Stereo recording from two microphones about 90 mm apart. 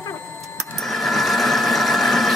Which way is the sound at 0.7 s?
Centre (ahead or behind).